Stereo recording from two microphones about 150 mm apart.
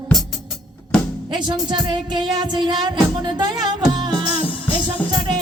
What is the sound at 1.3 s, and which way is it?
Music, 30° right (ahead or behind).